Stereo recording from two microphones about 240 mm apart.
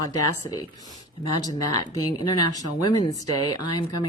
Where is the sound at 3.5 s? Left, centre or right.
Left.